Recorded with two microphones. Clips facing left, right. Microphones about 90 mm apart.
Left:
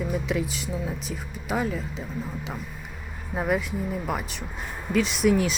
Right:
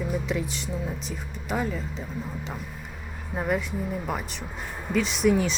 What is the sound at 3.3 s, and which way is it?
Speech, 10° left (ahead or behind).